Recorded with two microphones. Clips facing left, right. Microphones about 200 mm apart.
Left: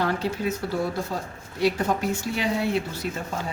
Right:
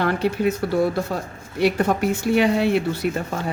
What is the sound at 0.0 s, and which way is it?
Speech, 65° right (ahead or behind).